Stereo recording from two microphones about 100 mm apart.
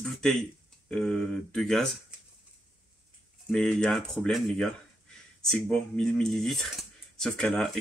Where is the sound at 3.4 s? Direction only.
5° left (ahead or behind).